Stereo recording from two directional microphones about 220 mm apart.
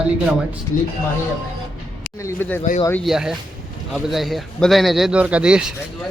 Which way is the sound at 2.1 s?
10° left (ahead or behind).